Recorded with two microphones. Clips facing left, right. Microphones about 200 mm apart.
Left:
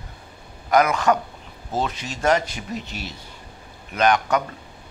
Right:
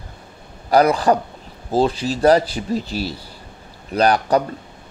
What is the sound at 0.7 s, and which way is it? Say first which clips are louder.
Speech: right 4 dB; 35° right (ahead or behind).